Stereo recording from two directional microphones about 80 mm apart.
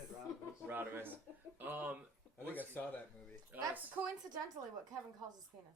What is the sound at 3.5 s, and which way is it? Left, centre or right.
Speech, centre.